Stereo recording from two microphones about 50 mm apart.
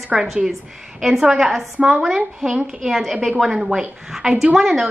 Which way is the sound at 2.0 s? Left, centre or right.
Centre.